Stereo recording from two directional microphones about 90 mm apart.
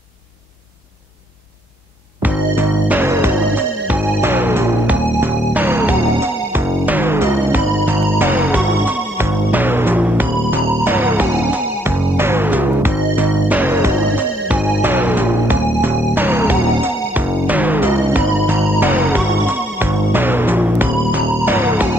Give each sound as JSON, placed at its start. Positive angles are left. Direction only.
{"t": 2.2, "sound": "music", "side_deg": -20}